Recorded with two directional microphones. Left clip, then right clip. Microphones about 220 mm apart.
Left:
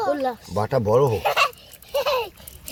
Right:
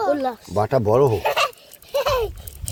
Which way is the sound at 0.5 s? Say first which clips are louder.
Right 2 dB; 50° right (ahead or behind).